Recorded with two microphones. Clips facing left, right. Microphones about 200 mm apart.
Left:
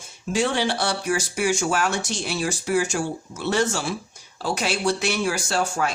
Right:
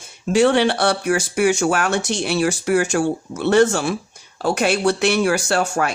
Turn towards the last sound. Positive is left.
turn(degrees=-65)  # may be behind; listen again after turning